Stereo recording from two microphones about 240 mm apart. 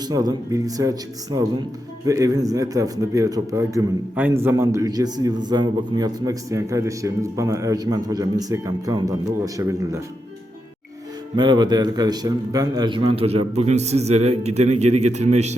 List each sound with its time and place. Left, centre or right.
0.0 s a man's voice: centre
11.3 s a man's voice: centre